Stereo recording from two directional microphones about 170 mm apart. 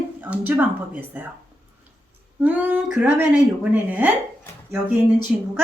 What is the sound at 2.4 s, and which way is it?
Speech, 10° right (ahead or behind).